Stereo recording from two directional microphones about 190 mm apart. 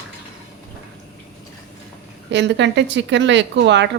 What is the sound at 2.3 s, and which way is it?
Speech, 70° right (ahead or behind).